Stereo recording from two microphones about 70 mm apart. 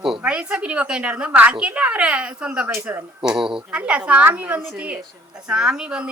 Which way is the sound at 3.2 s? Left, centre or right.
Centre.